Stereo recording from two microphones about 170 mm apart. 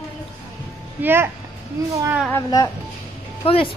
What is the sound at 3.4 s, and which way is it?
Speech, 30° left (ahead or behind).